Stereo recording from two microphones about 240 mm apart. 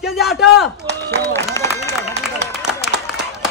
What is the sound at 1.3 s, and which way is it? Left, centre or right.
Run, centre.